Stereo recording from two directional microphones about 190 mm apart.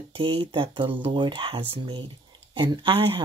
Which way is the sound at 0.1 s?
30° right (ahead or behind).